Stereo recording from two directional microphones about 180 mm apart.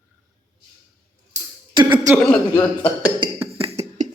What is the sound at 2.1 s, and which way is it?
Speech, 5° left (ahead or behind).